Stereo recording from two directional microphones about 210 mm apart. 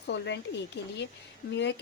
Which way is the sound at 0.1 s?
55° left (ahead or behind).